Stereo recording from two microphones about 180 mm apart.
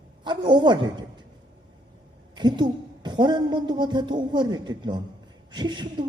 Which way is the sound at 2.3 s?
25° right (ahead or behind).